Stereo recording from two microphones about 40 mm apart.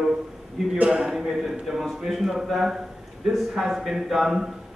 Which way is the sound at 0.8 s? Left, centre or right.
Right.